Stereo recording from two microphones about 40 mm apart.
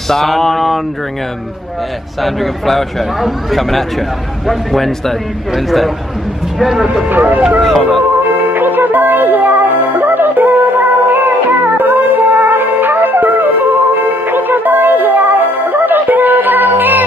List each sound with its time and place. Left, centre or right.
0.1 s a man's voice: centre
2.2 s a man's voice: centre
7.1 s speech: right
7.6 s speech: centre
8.5 s music: right